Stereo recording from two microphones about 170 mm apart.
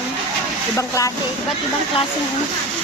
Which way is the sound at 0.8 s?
20° left (ahead or behind).